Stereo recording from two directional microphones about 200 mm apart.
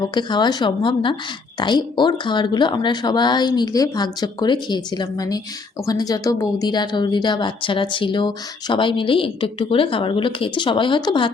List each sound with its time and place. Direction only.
0.1 s a woman's voice: 20° left (ahead or behind)